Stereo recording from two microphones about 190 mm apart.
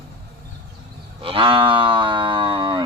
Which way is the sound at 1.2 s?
25° right (ahead or behind).